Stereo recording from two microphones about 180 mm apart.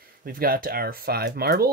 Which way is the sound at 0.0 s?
55° right (ahead or behind).